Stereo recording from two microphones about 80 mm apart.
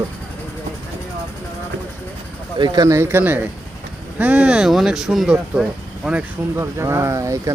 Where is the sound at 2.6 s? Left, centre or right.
Right.